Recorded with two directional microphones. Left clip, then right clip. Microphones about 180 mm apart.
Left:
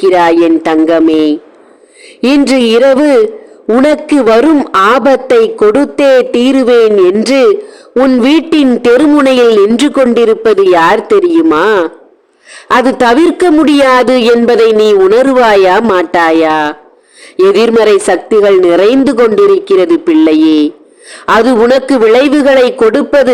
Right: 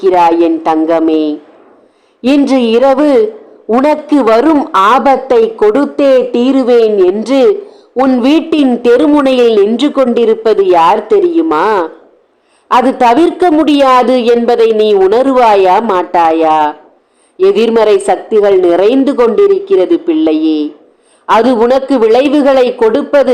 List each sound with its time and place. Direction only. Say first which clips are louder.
0.0 s speech: left 1 dB; 30° left (ahead or behind)
4.7 s speech: right 1 dB; 45° left (ahead or behind)
5.0 s speech: left 1 dB; 30° left (ahead or behind)